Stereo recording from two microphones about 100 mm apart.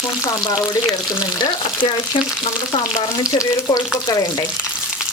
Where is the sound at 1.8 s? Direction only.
55° left (ahead or behind).